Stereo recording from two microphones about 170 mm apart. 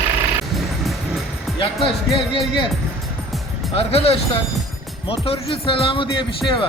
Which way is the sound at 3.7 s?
35° left (ahead or behind).